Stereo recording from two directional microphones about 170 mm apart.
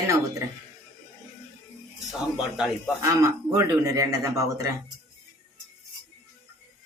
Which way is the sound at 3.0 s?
20° right (ahead or behind).